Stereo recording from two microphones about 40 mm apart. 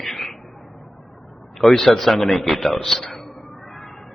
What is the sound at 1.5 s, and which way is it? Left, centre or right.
A man's voice, centre.